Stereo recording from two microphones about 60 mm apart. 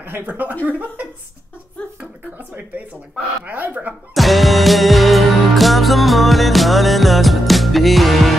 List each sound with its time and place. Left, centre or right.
0.0 s speech: right
2.3 s speech: right
4.1 s music: centre